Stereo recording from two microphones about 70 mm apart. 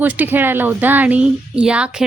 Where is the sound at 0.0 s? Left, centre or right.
Right.